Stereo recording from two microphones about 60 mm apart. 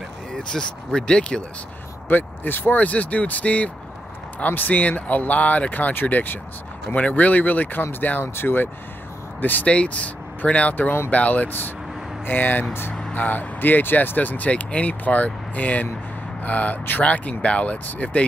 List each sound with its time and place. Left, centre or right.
0.3 s speech: centre
2.0 s speech: left